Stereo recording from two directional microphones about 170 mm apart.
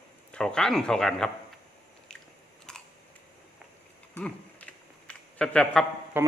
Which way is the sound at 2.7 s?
5° left (ahead or behind).